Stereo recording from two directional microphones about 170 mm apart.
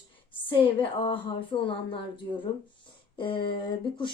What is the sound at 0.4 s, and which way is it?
A woman's voice, 30° left (ahead or behind).